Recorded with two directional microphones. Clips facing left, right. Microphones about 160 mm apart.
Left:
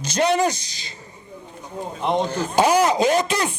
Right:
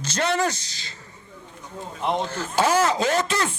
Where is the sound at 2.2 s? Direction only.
15° left (ahead or behind).